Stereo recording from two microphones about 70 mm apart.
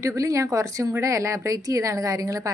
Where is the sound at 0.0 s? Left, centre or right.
Right.